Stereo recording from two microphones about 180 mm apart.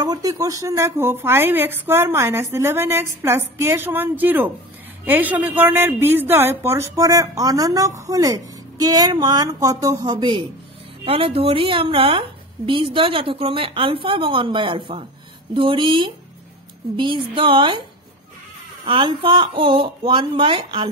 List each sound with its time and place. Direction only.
0.0 s a woman's voice: 20° right (ahead or behind)
18.9 s a woman's voice: 30° right (ahead or behind)